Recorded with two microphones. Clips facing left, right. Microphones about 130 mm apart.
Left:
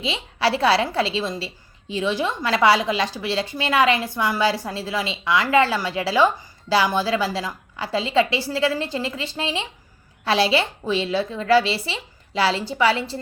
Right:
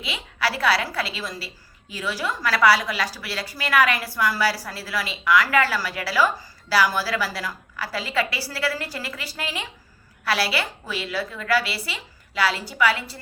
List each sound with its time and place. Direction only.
0.0 s a woman's voice: 25° left (ahead or behind)